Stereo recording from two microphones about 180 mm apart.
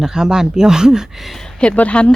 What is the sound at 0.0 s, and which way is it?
A woman's voice, 5° right (ahead or behind).